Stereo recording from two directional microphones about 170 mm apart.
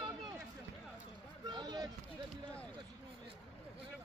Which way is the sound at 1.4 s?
25° right (ahead or behind).